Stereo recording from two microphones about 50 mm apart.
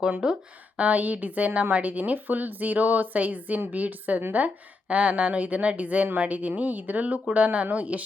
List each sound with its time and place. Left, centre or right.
0.2 s speech: centre
0.8 s a woman's voice: right